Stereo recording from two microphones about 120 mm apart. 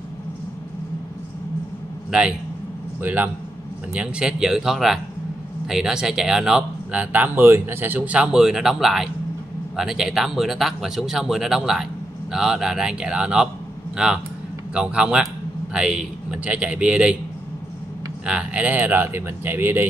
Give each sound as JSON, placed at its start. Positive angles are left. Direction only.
{"t": 2.0, "sound": "a man's voice", "side_deg": -5}
{"t": 18.2, "sound": "speech", "side_deg": -10}